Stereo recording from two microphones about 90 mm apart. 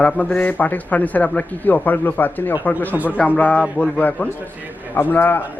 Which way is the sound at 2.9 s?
15° right (ahead or behind).